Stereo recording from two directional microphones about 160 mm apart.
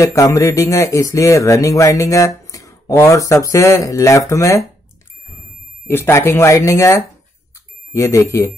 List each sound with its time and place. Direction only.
0.0 s speech: 20° left (ahead or behind)
5.9 s speech: 15° left (ahead or behind)